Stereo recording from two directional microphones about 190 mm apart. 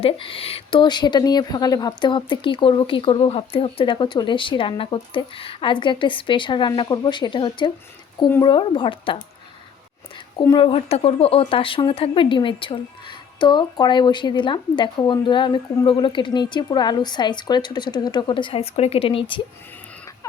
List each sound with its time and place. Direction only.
0.0 s speech: 30° left (ahead or behind)
10.3 s speech: 20° left (ahead or behind)